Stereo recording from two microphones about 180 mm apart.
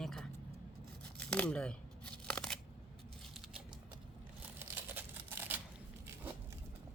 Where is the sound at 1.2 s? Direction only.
5° left (ahead or behind).